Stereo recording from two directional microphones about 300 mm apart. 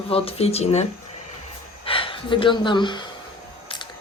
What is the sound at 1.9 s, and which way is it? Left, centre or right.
Speech, centre.